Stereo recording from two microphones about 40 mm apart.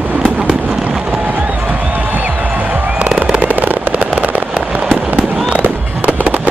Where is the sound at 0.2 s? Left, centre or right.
Centre.